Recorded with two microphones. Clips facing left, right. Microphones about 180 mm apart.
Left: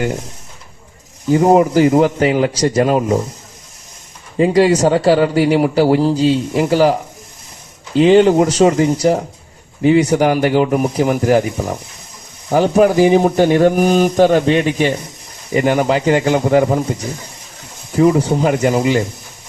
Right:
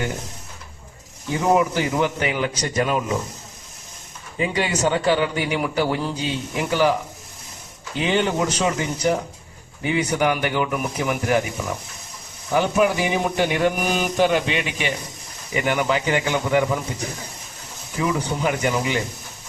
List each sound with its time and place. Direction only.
1.3 s a man's voice: 40° left (ahead or behind)
4.4 s a man's voice: 35° left (ahead or behind)
7.9 s a man's voice: 35° left (ahead or behind)
17.9 s a man's voice: 40° left (ahead or behind)